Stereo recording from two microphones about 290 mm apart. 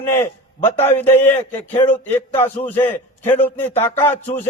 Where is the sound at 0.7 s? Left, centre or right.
Left.